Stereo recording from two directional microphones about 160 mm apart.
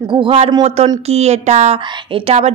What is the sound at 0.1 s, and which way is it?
A woman's voice, 35° right (ahead or behind).